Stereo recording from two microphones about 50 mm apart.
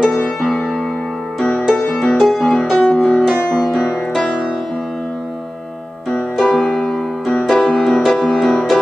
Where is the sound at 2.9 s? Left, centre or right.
Left.